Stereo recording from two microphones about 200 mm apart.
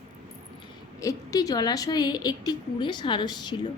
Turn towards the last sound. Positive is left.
turn(degrees=20)  # may be behind; listen again after turning